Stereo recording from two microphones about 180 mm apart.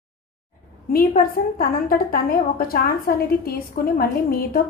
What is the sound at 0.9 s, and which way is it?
A woman's voice, 55° left (ahead or behind).